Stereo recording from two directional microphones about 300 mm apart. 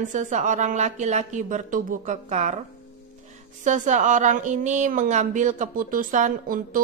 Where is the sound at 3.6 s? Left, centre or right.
Right.